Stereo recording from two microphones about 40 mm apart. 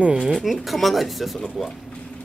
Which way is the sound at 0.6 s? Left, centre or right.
Centre.